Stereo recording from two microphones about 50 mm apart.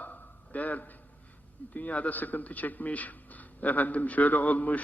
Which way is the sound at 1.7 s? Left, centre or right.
Left.